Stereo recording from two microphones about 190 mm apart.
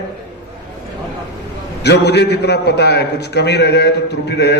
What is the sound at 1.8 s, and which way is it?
A man's voice, 60° left (ahead or behind).